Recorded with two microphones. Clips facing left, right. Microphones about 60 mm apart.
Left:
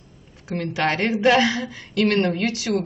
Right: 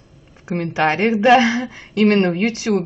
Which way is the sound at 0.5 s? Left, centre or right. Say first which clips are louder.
Right 4 dB; right.